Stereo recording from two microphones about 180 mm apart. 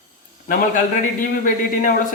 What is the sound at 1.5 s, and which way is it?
Speech, 45° left (ahead or behind).